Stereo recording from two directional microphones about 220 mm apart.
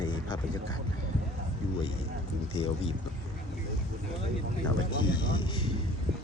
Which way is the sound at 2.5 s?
25° left (ahead or behind).